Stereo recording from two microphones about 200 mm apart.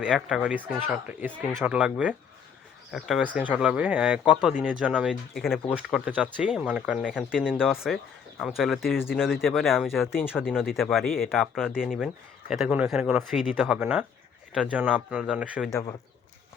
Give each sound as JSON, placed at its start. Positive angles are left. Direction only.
{"t": 0.0, "sound": "speech", "side_deg": -5}